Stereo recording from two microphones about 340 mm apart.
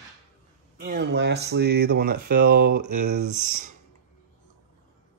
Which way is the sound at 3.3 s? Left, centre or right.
Right.